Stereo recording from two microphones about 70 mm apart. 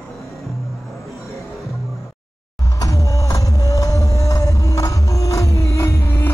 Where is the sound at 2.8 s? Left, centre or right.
Left.